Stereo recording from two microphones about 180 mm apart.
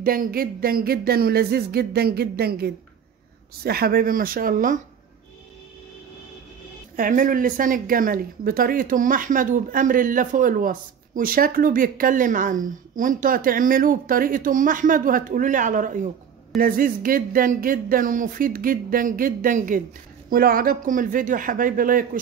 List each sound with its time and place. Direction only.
0.0 s speech: 55° right (ahead or behind)
7.0 s speech: 50° right (ahead or behind)